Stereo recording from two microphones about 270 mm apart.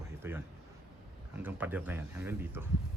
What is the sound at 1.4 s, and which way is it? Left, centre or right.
Speech, centre.